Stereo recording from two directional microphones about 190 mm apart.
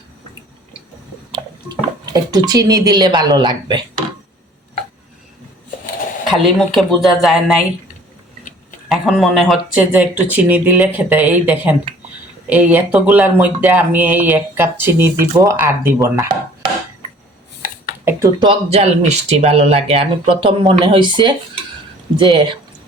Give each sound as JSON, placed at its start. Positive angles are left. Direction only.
{"t": 2.1, "sound": "speech", "side_deg": -20}
{"t": 6.2, "sound": "speech", "side_deg": 0}
{"t": 8.9, "sound": "speech", "side_deg": 0}
{"t": 18.0, "sound": "speech", "side_deg": -20}